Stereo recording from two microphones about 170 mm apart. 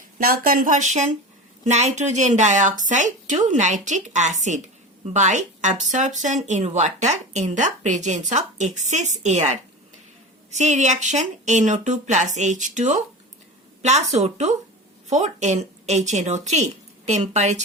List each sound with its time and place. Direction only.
0.2 s a woman's voice: 60° right (ahead or behind); by 17.6 s 40° right (ahead or behind)